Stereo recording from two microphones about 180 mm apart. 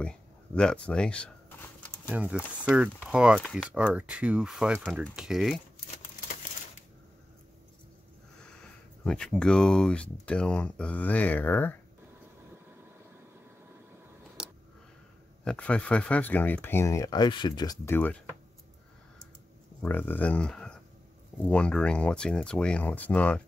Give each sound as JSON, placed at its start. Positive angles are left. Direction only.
{"t": 0.0, "sound": "a sound", "side_deg": 5}
{"t": 2.0, "sound": "speech", "side_deg": -5}
{"t": 3.7, "sound": "speech", "side_deg": -5}
{"t": 8.4, "sound": "speech", "side_deg": 5}
{"t": 14.4, "sound": "a sound", "side_deg": -5}
{"t": 15.4, "sound": "speech", "side_deg": 5}
{"t": 19.8, "sound": "speech", "side_deg": 10}